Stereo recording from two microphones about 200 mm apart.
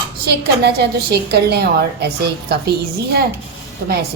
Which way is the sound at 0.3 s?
55° right (ahead or behind).